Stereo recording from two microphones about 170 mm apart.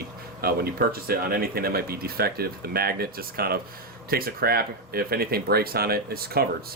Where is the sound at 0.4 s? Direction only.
60° right (ahead or behind).